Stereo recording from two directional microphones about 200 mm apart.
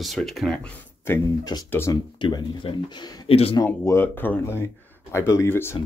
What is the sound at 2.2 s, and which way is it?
Speech, 20° left (ahead or behind).